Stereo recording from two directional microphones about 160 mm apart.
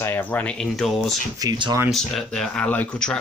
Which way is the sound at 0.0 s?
10° left (ahead or behind).